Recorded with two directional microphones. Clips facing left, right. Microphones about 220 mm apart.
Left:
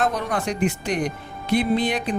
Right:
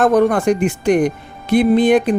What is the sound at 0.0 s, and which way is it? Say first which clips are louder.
Speech: right 11 dB; 50° right (ahead or behind).